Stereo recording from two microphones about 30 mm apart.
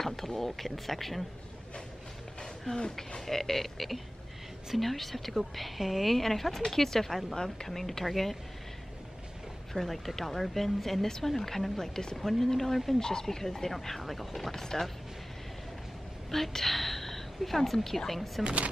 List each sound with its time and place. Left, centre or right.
0.0 s a woman's voice: centre
2.7 s speech: left
3.3 s a woman's voice: centre
9.8 s a woman's voice: centre
12.2 s a woman's voice: centre
14.5 s speech: centre
16.3 s a sound: centre
17.6 s a woman's voice: centre